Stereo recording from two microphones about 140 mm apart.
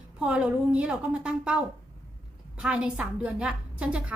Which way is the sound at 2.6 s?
5° right (ahead or behind).